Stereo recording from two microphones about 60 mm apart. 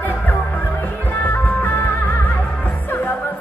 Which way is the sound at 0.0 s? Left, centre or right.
Left.